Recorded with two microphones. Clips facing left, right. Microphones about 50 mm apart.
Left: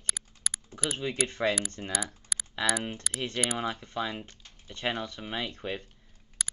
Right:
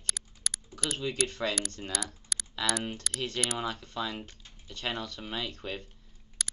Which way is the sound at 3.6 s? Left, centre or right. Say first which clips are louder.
Left 2 dB; left.